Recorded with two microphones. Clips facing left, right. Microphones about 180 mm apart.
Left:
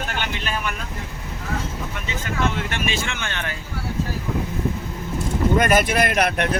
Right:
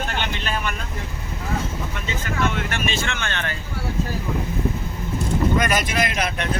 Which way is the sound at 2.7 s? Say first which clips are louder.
Even; 10° left (ahead or behind).